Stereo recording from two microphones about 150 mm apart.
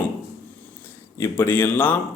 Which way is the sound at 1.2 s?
15° left (ahead or behind).